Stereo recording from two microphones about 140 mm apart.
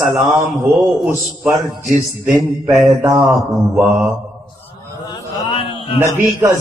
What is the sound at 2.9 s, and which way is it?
Speech, 20° right (ahead or behind).